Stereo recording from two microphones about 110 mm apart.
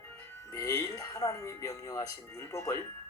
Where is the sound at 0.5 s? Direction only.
30° left (ahead or behind).